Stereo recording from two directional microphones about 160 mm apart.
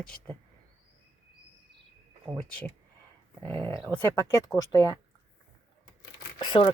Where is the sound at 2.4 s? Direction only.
5° left (ahead or behind).